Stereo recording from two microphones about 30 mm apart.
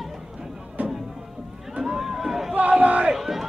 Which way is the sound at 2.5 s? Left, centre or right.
Right.